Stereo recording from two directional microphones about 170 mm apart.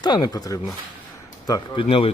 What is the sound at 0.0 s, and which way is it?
Speech, 25° left (ahead or behind).